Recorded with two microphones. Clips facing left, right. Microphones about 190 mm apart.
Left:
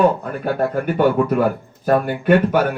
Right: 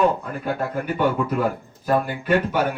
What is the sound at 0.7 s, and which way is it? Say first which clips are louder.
A man's voice: left 5 dB; 50° left (ahead or behind).